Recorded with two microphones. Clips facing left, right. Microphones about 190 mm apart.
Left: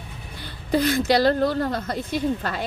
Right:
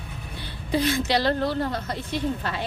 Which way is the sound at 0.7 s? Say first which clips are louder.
Left 4 dB; 40° left (ahead or behind).